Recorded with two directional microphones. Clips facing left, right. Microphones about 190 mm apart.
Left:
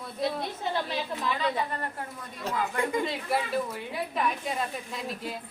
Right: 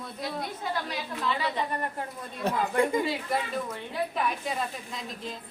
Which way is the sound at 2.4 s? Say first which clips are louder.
Right 4 dB; 60° right (ahead or behind).